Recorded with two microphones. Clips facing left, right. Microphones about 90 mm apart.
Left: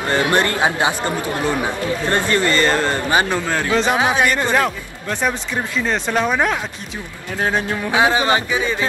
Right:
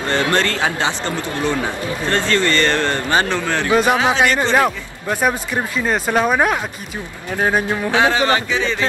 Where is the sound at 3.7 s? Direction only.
10° right (ahead or behind).